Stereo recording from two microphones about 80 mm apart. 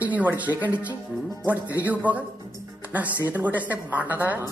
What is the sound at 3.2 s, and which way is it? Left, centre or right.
Speech, right.